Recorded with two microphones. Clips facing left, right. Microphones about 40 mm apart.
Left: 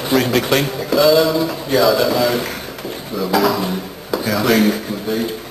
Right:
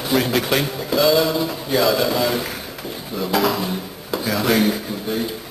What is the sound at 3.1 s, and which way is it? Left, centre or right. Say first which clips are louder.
Speech: left 3 dB; centre.